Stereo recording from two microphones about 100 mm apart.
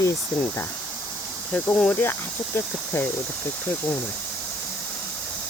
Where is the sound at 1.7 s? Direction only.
10° left (ahead or behind).